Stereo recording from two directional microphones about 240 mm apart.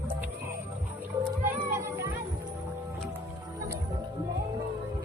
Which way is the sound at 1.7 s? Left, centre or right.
Centre.